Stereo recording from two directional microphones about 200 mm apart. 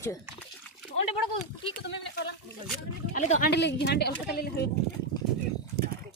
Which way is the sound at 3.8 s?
55° left (ahead or behind).